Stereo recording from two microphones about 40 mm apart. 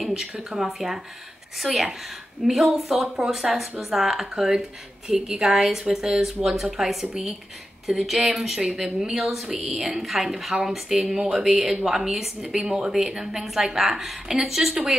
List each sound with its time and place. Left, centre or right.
0.0 s a woman's voice: centre
6.2 s speech: centre
7.9 s a woman's voice: centre